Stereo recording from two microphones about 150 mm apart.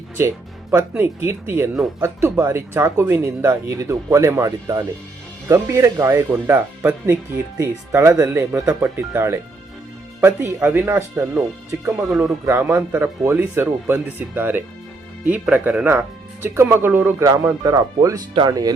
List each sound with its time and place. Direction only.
0.2 s speech: 20° right (ahead or behind)
12.0 s speech: 5° right (ahead or behind)
12.5 s speech: 15° right (ahead or behind)